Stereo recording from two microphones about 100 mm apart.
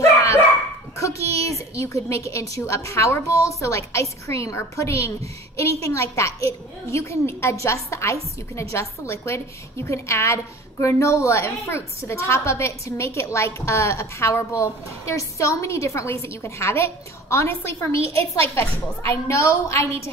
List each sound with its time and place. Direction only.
0.0 s dog: 30° left (ahead or behind)
0.9 s a sound: 30° left (ahead or behind)
2.5 s a woman's voice: 30° left (ahead or behind)